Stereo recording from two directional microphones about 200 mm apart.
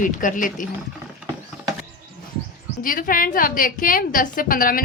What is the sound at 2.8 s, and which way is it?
A woman's voice, 45° left (ahead or behind).